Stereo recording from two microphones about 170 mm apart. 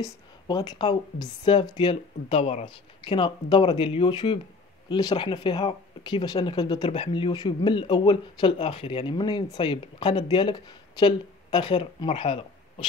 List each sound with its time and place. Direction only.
0.0 s speech: 25° left (ahead or behind)